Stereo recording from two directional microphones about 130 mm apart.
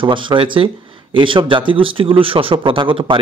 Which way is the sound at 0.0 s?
40° right (ahead or behind).